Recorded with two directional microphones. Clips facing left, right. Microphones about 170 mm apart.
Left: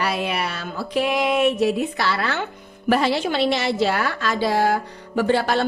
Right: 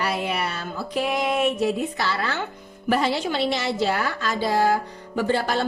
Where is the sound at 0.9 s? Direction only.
75° left (ahead or behind).